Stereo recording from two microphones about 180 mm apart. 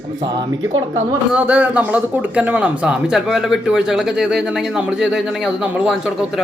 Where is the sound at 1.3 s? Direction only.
10° right (ahead or behind).